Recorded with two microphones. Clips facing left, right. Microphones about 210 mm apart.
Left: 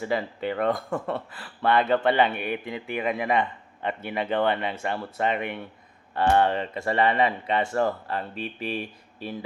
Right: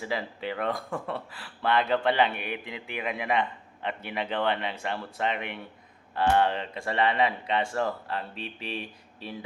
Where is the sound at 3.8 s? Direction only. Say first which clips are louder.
Left 4 dB; 50° left (ahead or behind).